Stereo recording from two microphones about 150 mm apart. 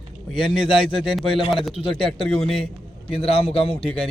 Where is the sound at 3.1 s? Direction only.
40° left (ahead or behind).